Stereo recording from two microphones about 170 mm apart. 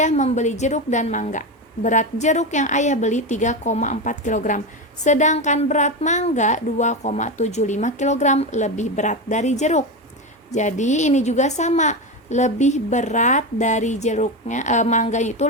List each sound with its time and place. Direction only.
0.0 s a woman's voice: 40° left (ahead or behind)